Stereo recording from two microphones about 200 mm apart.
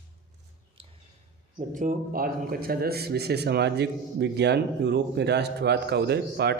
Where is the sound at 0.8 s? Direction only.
25° right (ahead or behind).